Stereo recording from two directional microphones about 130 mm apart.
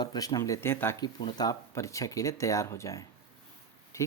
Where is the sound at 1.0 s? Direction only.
35° left (ahead or behind).